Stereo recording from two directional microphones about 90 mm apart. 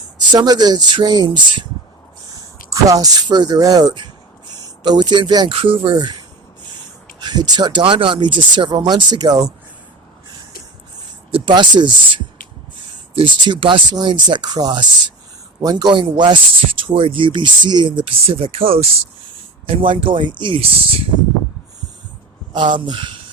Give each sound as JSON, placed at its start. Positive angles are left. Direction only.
{"t": 0.2, "sound": "speech", "side_deg": -50}
{"t": 2.3, "sound": "a sound", "side_deg": -40}
{"t": 3.2, "sound": "speech", "side_deg": -55}
{"t": 5.5, "sound": "speech", "side_deg": -80}
{"t": 7.2, "sound": "speech", "side_deg": -50}
{"t": 11.3, "sound": "a sound", "side_deg": -90}
{"t": 11.5, "sound": "speech", "side_deg": -60}
{"t": 13.9, "sound": "speech", "side_deg": -55}
{"t": 16.8, "sound": "speech", "side_deg": -75}
{"t": 22.5, "sound": "speech", "side_deg": -60}